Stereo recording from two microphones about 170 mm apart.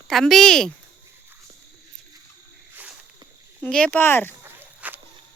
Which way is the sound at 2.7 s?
5° right (ahead or behind).